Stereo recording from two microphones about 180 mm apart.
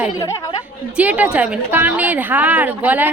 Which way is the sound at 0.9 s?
10° right (ahead or behind).